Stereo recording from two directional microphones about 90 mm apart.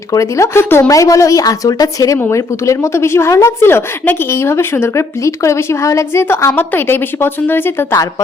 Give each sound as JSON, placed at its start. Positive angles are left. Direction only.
{"t": 0.1, "sound": "a woman's voice", "side_deg": 35}
{"t": 0.9, "sound": "a woman's voice", "side_deg": 40}
{"t": 2.1, "sound": "a woman's voice", "side_deg": 30}